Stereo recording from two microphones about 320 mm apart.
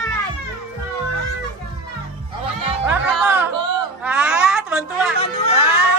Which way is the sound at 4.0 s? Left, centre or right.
Centre.